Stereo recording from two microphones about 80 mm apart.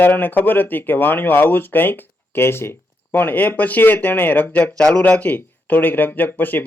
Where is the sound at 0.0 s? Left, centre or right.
Left.